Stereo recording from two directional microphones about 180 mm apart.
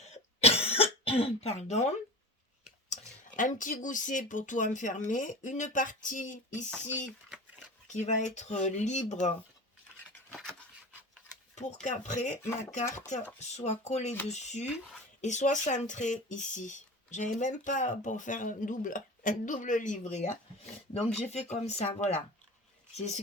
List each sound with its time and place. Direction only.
0.0 s cough: 35° left (ahead or behind)
2.9 s speech: 45° left (ahead or behind)
7.9 s speech: 40° left (ahead or behind)
11.5 s speech: 40° left (ahead or behind)
13.4 s speech: 40° left (ahead or behind)